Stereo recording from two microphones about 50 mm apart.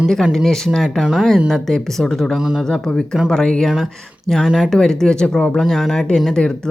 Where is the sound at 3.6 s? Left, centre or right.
Centre.